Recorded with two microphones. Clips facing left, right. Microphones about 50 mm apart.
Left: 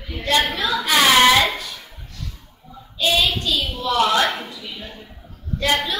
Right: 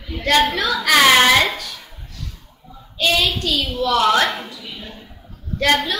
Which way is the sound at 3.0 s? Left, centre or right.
Right.